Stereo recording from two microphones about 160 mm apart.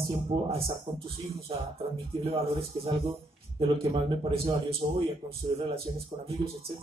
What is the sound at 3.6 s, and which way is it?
A man's voice, 35° right (ahead or behind).